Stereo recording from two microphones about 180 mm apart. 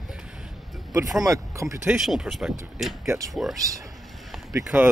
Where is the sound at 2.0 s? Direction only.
Centre (ahead or behind).